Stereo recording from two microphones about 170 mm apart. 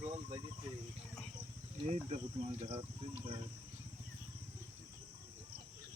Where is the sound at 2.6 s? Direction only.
30° right (ahead or behind).